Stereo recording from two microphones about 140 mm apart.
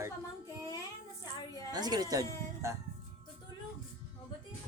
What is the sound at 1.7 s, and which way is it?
Speech, 30° right (ahead or behind).